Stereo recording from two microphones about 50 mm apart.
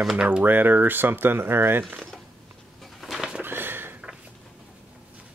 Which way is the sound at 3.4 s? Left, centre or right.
Right.